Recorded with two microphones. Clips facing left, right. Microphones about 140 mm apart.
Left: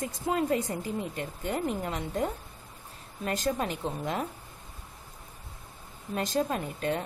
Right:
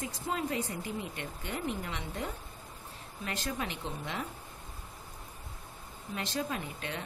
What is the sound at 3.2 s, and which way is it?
Speech, 45° left (ahead or behind).